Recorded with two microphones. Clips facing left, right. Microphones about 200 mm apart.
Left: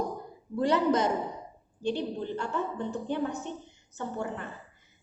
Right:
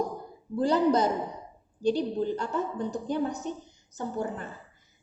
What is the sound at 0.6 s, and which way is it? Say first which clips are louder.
A woman's voice: right 2 dB; 35° right (ahead or behind).